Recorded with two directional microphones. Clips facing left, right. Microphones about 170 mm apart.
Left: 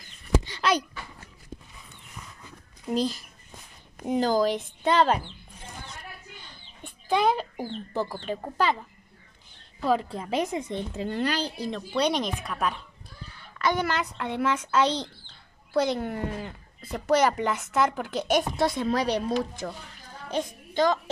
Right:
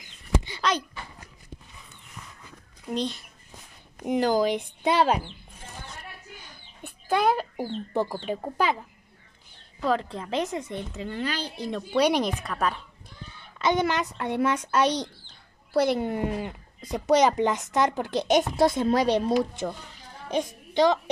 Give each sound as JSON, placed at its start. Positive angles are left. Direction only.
{"t": 0.6, "sound": "a sound", "side_deg": 10}
{"t": 2.9, "sound": "speech", "side_deg": 5}
{"t": 4.0, "sound": "speech", "side_deg": -10}
{"t": 6.4, "sound": "chicken", "side_deg": -5}
{"t": 7.9, "sound": "speech", "side_deg": -15}
{"t": 9.8, "sound": "a woman's voice", "side_deg": 10}
{"t": 11.0, "sound": "a child's voice", "side_deg": 40}
{"t": 11.7, "sound": "speech", "side_deg": -10}
{"t": 12.4, "sound": "speech", "side_deg": 5}
{"t": 13.3, "sound": "a child's voice", "side_deg": -20}